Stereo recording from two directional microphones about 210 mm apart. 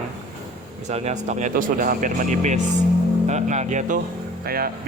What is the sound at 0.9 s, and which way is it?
A man's voice, 30° right (ahead or behind).